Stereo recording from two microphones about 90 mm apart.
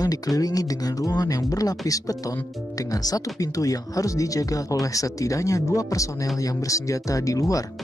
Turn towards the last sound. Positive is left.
turn(degrees=40)  # may be behind; listen again after turning